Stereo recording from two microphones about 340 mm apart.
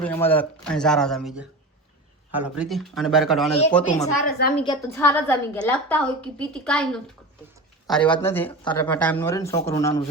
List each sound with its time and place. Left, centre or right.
0.0 s a woman's voice: centre
3.9 s a woman's voice: left
4.5 s a woman's voice: centre